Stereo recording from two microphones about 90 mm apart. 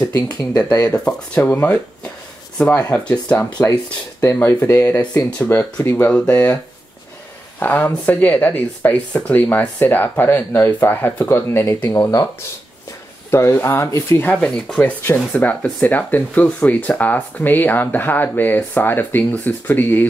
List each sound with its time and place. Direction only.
0.1 s speech: 45° left (ahead or behind)
0.8 s speech: 15° left (ahead or behind)
3.0 s speech: 15° left (ahead or behind)
4.2 s speech: 30° left (ahead or behind)
7.6 s speech: 20° left (ahead or behind); by 12.3 s 35° left (ahead or behind)
13.3 s speech: 30° left (ahead or behind)
14.2 s speech: 10° left (ahead or behind)